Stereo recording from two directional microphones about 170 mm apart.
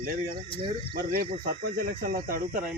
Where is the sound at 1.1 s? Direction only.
60° right (ahead or behind).